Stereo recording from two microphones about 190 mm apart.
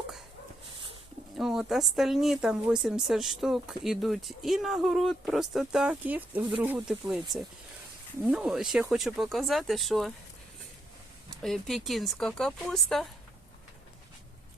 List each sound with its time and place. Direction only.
1.4 s a woman's voice: centre (ahead or behind)
11.4 s a woman's voice: centre (ahead or behind)